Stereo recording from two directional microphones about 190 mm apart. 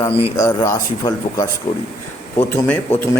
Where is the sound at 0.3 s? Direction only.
15° left (ahead or behind).